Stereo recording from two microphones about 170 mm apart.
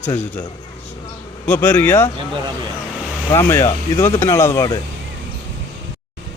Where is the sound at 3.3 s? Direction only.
15° left (ahead or behind).